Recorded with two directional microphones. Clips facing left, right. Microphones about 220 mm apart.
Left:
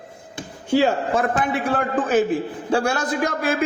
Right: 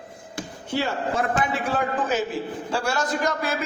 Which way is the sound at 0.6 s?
90° left.